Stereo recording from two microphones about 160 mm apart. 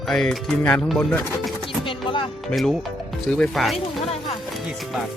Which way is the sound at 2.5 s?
Centre (ahead or behind).